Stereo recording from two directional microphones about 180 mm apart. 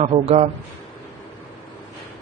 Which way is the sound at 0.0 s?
35° right (ahead or behind).